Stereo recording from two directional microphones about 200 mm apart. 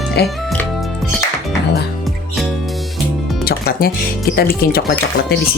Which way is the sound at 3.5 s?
50° left (ahead or behind).